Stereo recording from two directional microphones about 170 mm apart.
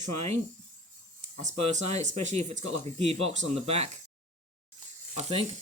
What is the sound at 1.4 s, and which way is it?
Speech, 45° right (ahead or behind).